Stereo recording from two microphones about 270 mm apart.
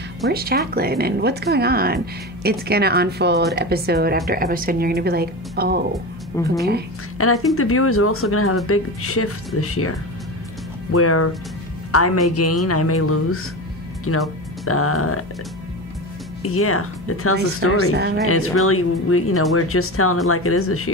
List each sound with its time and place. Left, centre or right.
0.3 s speech: right
6.4 s a woman's voice: centre
7.2 s speech: left
9.6 s music: left
14.1 s speech: left
14.7 s music: left
16.4 s speech: left
17.9 s speech: right
18.3 s speech: left